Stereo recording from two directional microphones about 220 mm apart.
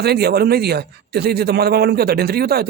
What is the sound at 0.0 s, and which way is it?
A man's voice, 45° right (ahead or behind).